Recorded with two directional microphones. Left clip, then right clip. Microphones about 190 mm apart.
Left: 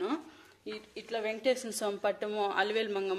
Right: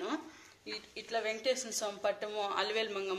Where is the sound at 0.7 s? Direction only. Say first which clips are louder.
Left 2 dB; 50° left (ahead or behind).